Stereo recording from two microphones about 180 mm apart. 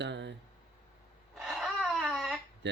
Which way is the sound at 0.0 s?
75° right (ahead or behind).